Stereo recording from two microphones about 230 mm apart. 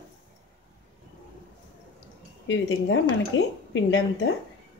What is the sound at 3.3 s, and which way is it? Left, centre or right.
Speech, left.